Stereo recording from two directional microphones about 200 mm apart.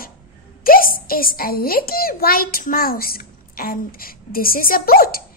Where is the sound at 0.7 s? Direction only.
45° left (ahead or behind).